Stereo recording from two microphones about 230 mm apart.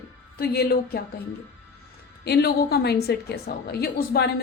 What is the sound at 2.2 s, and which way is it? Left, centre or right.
A woman's voice, left.